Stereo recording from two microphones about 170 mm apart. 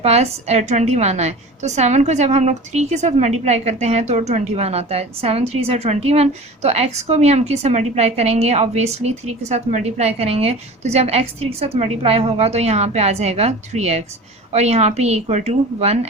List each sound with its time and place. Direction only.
0.0 s a woman's voice: 40° right (ahead or behind)